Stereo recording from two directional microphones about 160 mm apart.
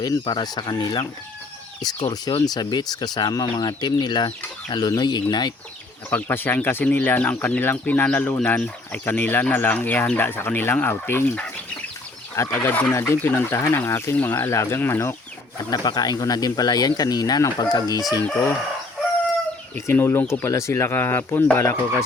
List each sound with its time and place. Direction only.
0.0 s speech: 25° left (ahead or behind)
6.1 s speech: 10° left (ahead or behind)
15.7 s speech: 25° left (ahead or behind)
19.7 s speech: 15° left (ahead or behind)